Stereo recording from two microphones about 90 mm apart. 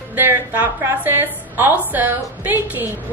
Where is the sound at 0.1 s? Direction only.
25° right (ahead or behind).